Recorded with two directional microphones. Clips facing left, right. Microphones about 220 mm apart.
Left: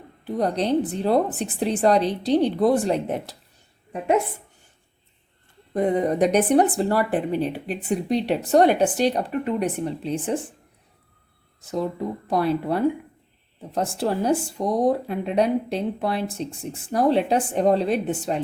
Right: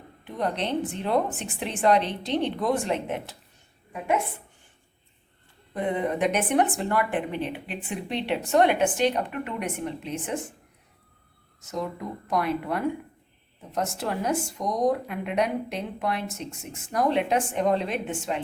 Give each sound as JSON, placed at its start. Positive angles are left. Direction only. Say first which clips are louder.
{"t": 0.3, "sound": "speech", "louder": "left 6 dB", "side_deg": 35}
{"t": 5.7, "sound": "speech", "louder": "left 6 dB", "side_deg": 40}
{"t": 11.6, "sound": "speech", "louder": "left 6 dB", "side_deg": 30}